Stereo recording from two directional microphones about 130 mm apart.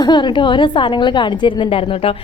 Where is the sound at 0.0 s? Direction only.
35° left (ahead or behind).